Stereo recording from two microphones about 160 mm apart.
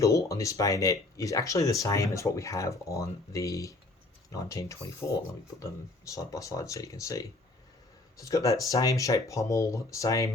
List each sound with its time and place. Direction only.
0.0 s speech: 20° left (ahead or behind)